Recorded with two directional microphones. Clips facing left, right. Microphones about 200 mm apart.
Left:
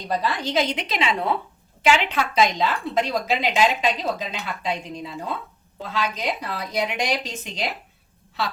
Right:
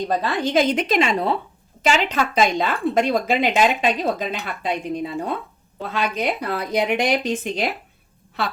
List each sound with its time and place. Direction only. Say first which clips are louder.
0.1 s speech: right 1 dB; 50° right (ahead or behind)